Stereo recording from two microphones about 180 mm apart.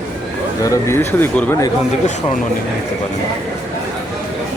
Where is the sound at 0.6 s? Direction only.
15° left (ahead or behind).